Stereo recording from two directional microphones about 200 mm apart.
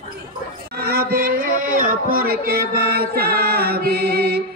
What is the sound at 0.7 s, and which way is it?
Music, 50° right (ahead or behind).